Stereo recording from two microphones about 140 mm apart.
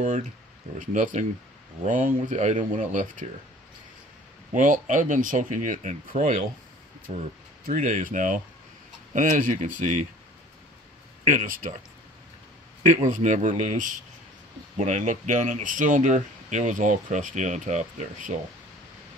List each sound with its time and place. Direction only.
0.7 s speech: 65° right (ahead or behind)
4.6 s speech: 65° right (ahead or behind)
7.6 s speech: 70° right (ahead or behind)
11.2 s speech: 75° right (ahead or behind)
12.8 s speech: 75° right (ahead or behind)